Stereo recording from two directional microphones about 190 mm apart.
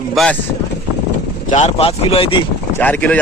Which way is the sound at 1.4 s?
35° left (ahead or behind).